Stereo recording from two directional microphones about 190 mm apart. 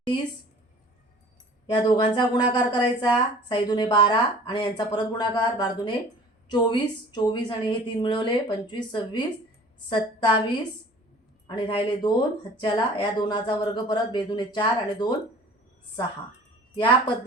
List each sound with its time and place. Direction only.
1.6 s a woman's voice: 25° left (ahead or behind)
16.7 s a woman's voice: 25° left (ahead or behind)